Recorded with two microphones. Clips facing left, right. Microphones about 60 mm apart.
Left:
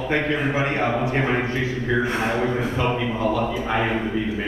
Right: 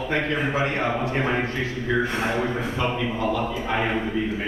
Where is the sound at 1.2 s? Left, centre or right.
Centre.